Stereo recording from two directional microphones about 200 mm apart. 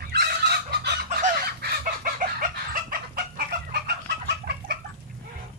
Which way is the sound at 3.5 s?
55° right (ahead or behind).